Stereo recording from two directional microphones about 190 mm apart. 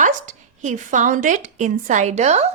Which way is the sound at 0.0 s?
40° right (ahead or behind).